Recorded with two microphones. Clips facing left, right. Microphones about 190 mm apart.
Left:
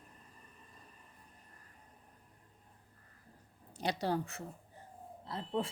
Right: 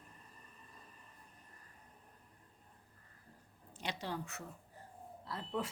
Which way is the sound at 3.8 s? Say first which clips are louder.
Left 7 dB; 35° left (ahead or behind).